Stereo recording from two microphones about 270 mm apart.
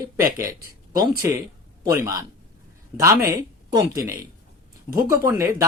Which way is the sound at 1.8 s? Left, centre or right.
Centre.